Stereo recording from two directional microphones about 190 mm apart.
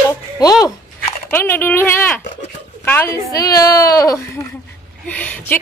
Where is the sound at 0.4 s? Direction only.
20° left (ahead or behind).